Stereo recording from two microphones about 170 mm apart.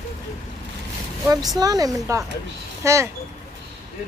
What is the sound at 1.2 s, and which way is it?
Speech, 20° right (ahead or behind).